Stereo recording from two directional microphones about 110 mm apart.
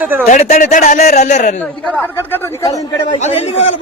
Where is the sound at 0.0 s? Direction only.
10° right (ahead or behind).